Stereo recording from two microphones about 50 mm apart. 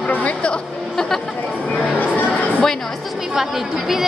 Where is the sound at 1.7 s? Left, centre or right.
Left.